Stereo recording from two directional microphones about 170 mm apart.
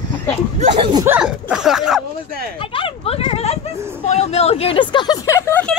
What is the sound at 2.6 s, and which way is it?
Speech, 30° left (ahead or behind).